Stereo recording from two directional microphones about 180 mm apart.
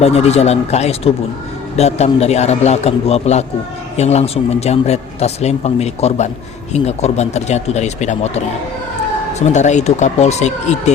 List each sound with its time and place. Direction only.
0.0 s speech: 35° left (ahead or behind)
9.5 s speech: 40° left (ahead or behind)